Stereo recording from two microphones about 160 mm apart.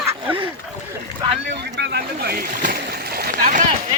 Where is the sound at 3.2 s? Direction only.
55° right (ahead or behind).